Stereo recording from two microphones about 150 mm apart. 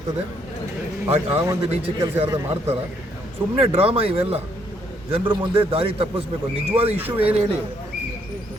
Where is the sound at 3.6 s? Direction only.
40° right (ahead or behind).